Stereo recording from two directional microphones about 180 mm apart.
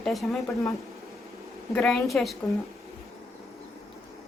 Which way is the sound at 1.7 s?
Centre (ahead or behind).